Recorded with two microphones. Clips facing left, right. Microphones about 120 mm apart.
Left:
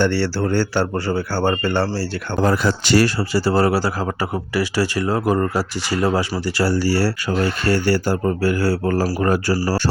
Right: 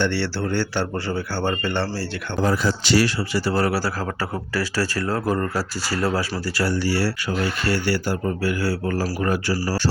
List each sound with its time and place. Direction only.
0.0 s speech: 45° left (ahead or behind)
2.4 s speech: 60° left (ahead or behind); by 9.6 s 40° left (ahead or behind)